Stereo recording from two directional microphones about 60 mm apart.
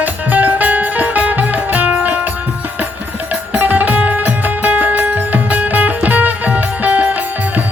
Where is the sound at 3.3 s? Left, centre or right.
Right.